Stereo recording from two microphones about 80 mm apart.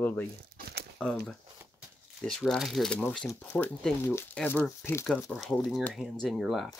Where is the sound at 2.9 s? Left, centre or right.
Centre.